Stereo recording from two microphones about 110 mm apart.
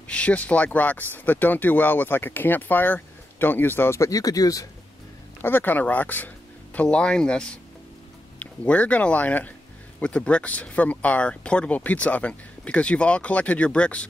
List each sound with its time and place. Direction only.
0.0 s speech: 10° left (ahead or behind); by 4.6 s 30° left (ahead or behind)
5.4 s speech: 20° left (ahead or behind)